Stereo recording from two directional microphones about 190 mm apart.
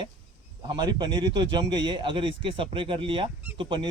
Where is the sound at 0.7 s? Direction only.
20° right (ahead or behind).